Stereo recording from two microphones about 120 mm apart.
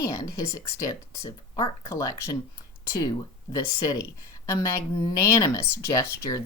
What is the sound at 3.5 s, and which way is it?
Speech, 30° left (ahead or behind).